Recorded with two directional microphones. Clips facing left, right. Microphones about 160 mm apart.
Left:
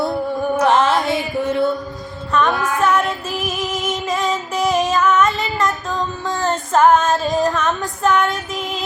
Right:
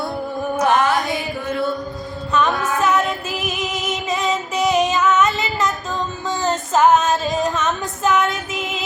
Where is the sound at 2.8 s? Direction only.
Centre (ahead or behind).